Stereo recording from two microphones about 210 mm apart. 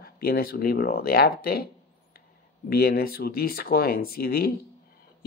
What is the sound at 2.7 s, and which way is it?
Speech, 45° left (ahead or behind).